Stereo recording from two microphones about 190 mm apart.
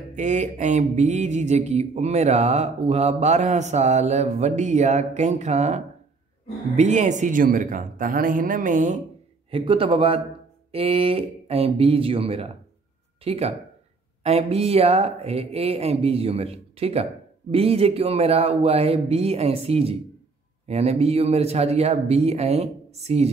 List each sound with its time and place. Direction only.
0.1 s speech: 40° right (ahead or behind)
6.8 s speech: 40° right (ahead or behind)
9.5 s a man's voice: 30° right (ahead or behind)